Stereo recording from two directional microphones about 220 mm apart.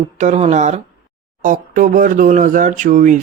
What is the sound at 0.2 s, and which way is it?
Speech, 30° right (ahead or behind).